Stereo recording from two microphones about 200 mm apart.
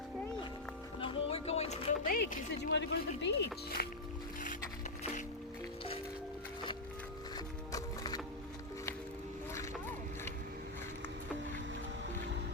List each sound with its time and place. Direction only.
0.9 s music: 25° left (ahead or behind)
2.0 s speech: 45° left (ahead or behind)
2.7 s speech: 60° left (ahead or behind)
7.3 s music: 20° left (ahead or behind)